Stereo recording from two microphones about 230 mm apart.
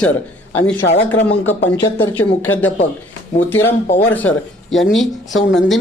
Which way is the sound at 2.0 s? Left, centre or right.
Centre.